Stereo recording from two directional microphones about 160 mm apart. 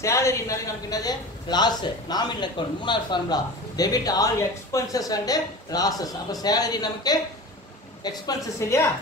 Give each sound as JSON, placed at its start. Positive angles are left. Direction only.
{"t": 0.0, "sound": "a man's voice", "side_deg": 20}